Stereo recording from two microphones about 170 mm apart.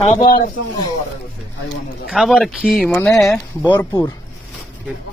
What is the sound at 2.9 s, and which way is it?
Speech, 15° left (ahead or behind).